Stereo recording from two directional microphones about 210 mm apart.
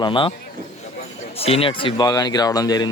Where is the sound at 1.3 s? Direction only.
30° left (ahead or behind).